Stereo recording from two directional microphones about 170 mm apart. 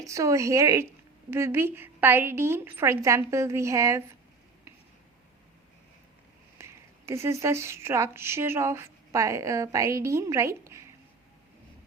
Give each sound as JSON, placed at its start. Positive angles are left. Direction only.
{"t": 0.0, "sound": "a woman's voice", "side_deg": -20}
{"t": 6.6, "sound": "a woman's voice", "side_deg": -15}